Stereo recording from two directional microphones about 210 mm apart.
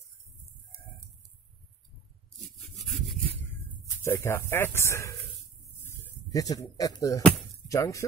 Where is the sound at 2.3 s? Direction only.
Centre (ahead or behind).